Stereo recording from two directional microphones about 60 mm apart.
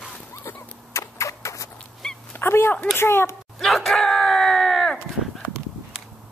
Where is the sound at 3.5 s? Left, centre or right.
Centre.